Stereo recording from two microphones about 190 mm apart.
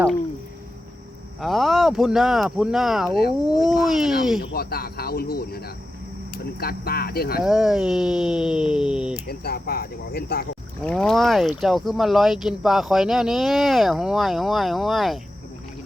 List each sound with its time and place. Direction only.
1.4 s speech: centre (ahead or behind)
4.5 s speech: 55° left (ahead or behind)
7.4 s speech: centre (ahead or behind)
9.1 s speech: 55° left (ahead or behind)
10.8 s speech: 5° left (ahead or behind)